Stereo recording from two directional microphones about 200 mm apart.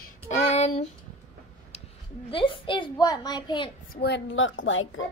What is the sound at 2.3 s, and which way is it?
A child's voice, 25° left (ahead or behind).